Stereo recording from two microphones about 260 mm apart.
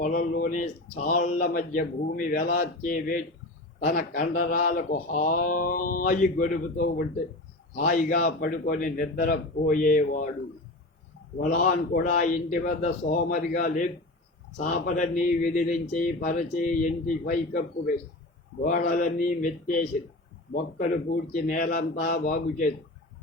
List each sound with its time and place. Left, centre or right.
0.0 s speech: left
11.3 s speech: left
21.3 s speech: left